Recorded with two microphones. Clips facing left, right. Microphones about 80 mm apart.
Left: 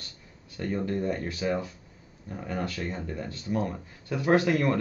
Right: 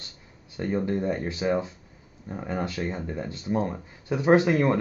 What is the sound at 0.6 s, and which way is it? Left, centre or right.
Speech, right.